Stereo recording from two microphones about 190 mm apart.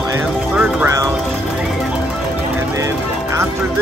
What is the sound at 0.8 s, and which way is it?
Speech, 15° right (ahead or behind).